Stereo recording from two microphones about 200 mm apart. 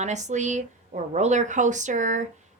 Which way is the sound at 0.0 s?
35° right (ahead or behind).